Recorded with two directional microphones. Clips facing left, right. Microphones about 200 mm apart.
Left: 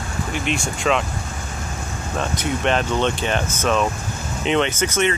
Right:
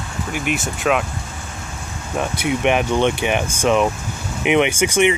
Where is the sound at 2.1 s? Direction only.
10° right (ahead or behind).